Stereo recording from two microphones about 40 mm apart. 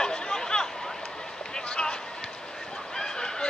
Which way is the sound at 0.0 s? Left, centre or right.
Centre.